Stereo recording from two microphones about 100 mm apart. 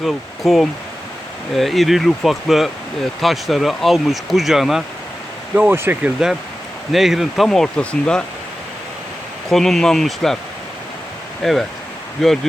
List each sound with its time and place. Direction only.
0.0 s speech: centre (ahead or behind)
5.5 s speech: 20° right (ahead or behind)
6.9 s speech: 5° right (ahead or behind)
9.5 s speech: 5° left (ahead or behind)
11.4 s speech: 5° left (ahead or behind)